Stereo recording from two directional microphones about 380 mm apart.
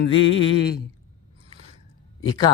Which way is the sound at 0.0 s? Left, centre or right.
Left.